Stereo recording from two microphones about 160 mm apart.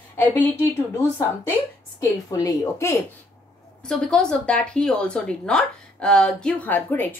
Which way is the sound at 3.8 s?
5° left (ahead or behind).